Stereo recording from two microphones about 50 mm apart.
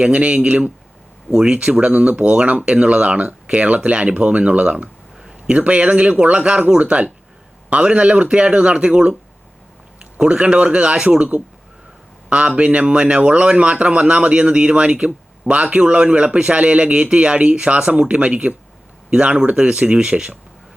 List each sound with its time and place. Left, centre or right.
0.0 s a man's voice: right
10.2 s a man's voice: right